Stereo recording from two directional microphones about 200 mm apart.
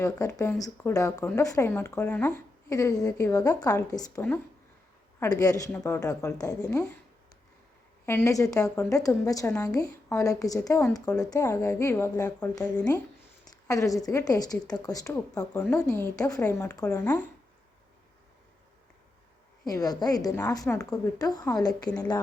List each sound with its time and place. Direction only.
0.0 s a woman's voice: 15° left (ahead or behind)
8.0 s a woman's voice: 10° left (ahead or behind)
13.7 s a woman's voice: 15° left (ahead or behind)
15.8 s a woman's voice: 5° left (ahead or behind)
19.6 s a woman's voice: 20° left (ahead or behind)